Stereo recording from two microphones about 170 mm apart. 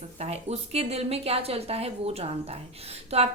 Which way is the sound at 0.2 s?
40° right (ahead or behind).